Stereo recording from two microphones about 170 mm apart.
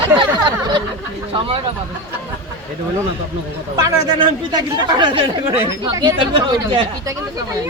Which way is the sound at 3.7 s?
20° right (ahead or behind).